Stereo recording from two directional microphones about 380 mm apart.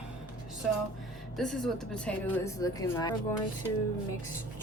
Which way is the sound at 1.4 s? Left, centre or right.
Centre.